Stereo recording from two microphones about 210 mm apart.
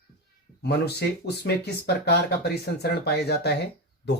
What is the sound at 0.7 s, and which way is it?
Speech, 50° left (ahead or behind).